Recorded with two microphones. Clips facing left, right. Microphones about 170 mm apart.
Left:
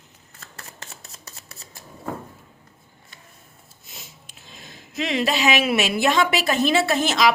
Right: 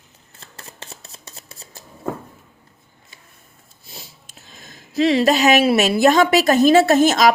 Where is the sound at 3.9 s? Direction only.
40° right (ahead or behind).